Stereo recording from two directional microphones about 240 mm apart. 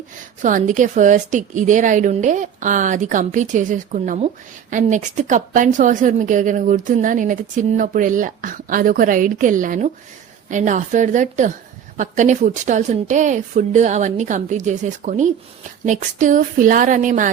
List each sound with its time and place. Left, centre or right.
0.4 s a woman's voice: right